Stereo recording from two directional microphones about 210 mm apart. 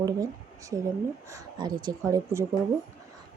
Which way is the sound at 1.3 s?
20° right (ahead or behind).